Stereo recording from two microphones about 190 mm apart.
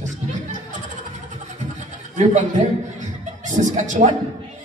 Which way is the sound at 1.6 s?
40° right (ahead or behind).